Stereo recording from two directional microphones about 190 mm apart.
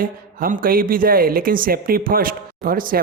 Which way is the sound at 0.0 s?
50° right (ahead or behind).